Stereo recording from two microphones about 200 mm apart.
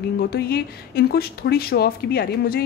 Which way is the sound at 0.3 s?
50° left (ahead or behind).